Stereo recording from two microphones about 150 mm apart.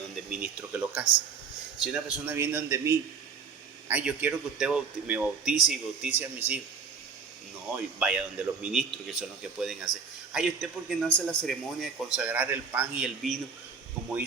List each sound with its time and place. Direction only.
0.3 s a man's voice: 10° right (ahead or behind)
7.9 s a man's voice: 5° right (ahead or behind)